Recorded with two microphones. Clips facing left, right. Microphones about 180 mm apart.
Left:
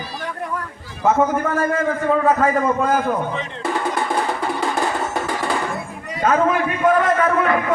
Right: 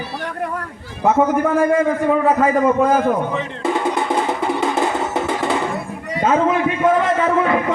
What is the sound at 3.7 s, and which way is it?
Music, 20° right (ahead or behind).